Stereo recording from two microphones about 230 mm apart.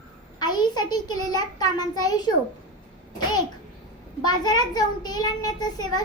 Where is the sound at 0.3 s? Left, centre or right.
Centre.